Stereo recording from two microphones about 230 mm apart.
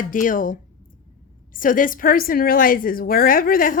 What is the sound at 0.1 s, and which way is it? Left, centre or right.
Speech, left.